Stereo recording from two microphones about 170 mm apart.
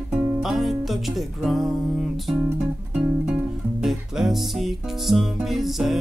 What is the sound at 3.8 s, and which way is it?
Music, centre (ahead or behind).